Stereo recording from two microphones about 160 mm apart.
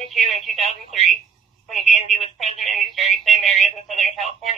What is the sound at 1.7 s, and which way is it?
Speech, centre (ahead or behind).